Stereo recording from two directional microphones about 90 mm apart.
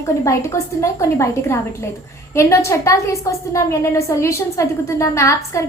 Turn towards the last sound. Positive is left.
turn(degrees=35)  # may be behind; listen again after turning